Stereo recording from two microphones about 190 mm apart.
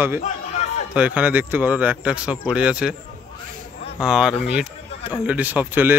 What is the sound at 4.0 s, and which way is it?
Speech, 5° right (ahead or behind).